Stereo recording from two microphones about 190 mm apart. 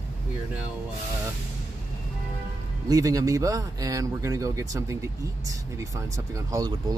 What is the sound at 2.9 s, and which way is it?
Speech, 20° right (ahead or behind).